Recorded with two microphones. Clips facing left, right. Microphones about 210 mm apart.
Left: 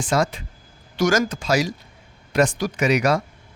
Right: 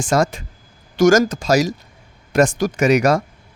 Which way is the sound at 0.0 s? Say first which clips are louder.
Right 4 dB; 45° right (ahead or behind).